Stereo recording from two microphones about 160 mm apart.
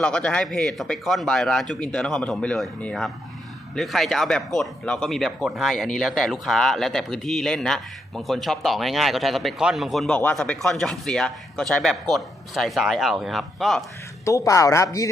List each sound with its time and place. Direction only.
0.0 s speech: 5° left (ahead or behind)
14.3 s a woman's voice: 20° left (ahead or behind)